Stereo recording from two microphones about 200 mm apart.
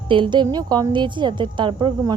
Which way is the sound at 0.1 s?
25° right (ahead or behind).